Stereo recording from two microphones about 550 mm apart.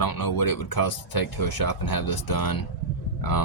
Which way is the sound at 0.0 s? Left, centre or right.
Left.